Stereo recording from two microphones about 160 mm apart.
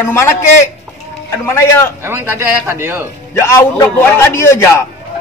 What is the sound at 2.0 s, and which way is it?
Speech, 15° right (ahead or behind).